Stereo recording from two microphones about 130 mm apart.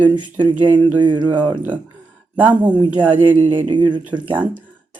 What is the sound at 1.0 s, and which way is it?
Speech, 35° right (ahead or behind).